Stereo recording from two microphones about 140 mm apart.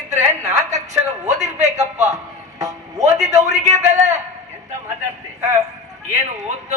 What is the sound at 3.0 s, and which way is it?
A man's voice, 55° right (ahead or behind).